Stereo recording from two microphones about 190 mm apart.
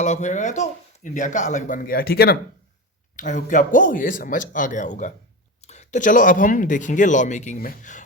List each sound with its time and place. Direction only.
0.0 s speech: 40° left (ahead or behind)
3.2 s a man's voice: 40° left (ahead or behind)